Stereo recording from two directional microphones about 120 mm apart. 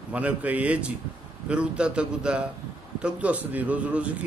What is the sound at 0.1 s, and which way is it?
A man's voice, 10° right (ahead or behind).